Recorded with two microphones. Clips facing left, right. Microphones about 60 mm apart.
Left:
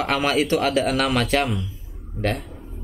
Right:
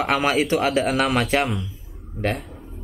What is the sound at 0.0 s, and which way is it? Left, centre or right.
Speech, centre.